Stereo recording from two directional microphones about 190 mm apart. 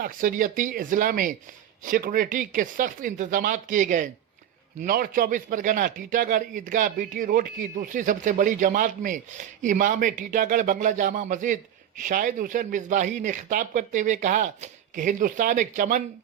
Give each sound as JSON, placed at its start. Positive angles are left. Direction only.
{"t": 0.0, "sound": "a man's voice", "side_deg": -45}